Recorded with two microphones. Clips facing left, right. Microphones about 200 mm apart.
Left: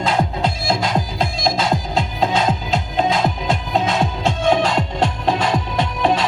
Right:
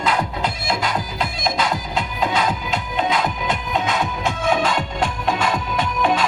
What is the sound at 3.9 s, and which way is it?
Music, 25° left (ahead or behind).